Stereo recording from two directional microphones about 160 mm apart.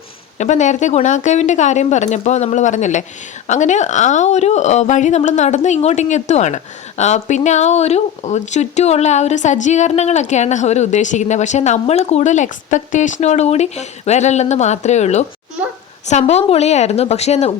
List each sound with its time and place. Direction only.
0.3 s speech: 50° left (ahead or behind)